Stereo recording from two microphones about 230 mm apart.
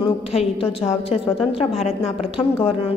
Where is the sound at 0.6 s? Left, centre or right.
Left.